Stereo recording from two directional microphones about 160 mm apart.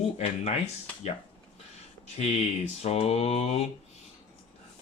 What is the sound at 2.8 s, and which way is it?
Speech, 40° left (ahead or behind).